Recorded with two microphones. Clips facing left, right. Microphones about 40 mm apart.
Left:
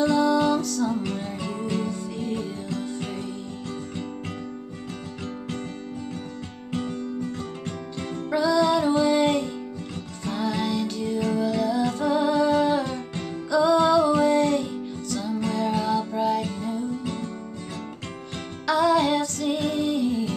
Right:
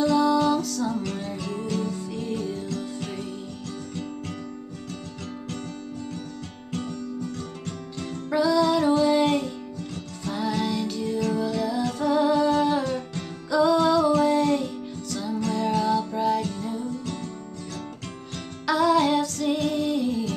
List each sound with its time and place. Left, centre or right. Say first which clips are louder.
0.0 s music: even; centre
2.0 s music: left 1 dB; centre
6.7 s music: left 2 dB; centre
8.3 s music: even; centre
10.6 s music: left 1 dB; centre
13.7 s humming: left 1 dB; centre
14.2 s music: left 1 dB; centre
18.7 s music: even; centre